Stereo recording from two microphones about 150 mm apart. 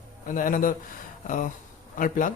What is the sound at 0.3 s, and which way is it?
Speech, 65° left (ahead or behind).